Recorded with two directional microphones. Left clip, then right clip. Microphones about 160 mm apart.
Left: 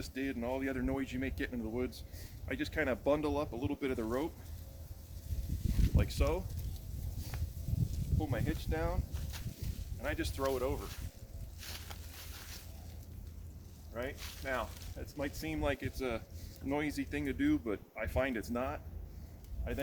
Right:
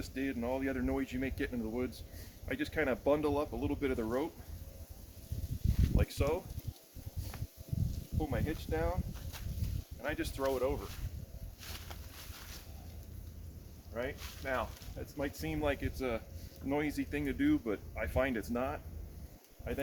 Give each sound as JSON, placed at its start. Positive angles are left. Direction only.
{"t": 0.0, "sound": "speech", "side_deg": 15}
{"t": 5.6, "sound": "a sound", "side_deg": 45}
{"t": 6.0, "sound": "speech", "side_deg": 10}
{"t": 8.2, "sound": "speech", "side_deg": 15}
{"t": 10.0, "sound": "speech", "side_deg": 15}
{"t": 11.6, "sound": "boat", "side_deg": 50}
{"t": 13.9, "sound": "speech", "side_deg": 10}
{"t": 14.2, "sound": "speech", "side_deg": 55}
{"t": 14.4, "sound": "speech", "side_deg": 10}